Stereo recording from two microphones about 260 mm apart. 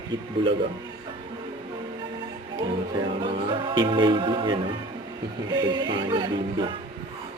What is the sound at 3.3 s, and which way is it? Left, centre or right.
Music, centre.